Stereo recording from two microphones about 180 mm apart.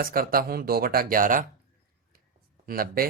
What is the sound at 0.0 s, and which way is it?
Speech, 55° right (ahead or behind).